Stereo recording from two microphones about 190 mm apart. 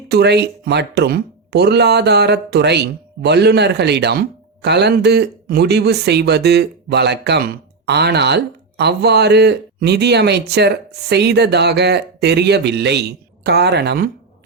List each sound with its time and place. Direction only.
0.1 s speech: 60° right (ahead or behind)